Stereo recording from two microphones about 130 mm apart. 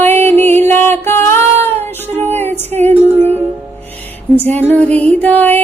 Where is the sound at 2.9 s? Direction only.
15° right (ahead or behind).